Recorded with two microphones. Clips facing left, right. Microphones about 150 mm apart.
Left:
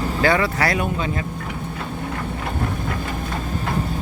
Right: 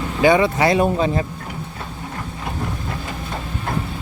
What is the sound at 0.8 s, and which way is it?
Speech, 35° right (ahead or behind).